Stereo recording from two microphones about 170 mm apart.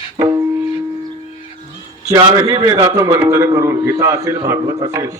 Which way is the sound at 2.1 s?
25° right (ahead or behind).